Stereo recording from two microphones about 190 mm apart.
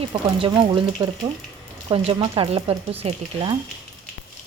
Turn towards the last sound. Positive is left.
turn(degrees=-30)  # may be behind; listen again after turning